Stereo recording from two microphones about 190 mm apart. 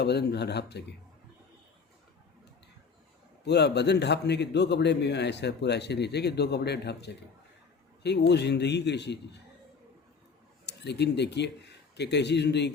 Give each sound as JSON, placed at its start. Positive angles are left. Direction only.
{"t": 0.0, "sound": "a man's voice", "side_deg": 60}
{"t": 3.4, "sound": "a man's voice", "side_deg": 60}
{"t": 10.7, "sound": "a man's voice", "side_deg": 60}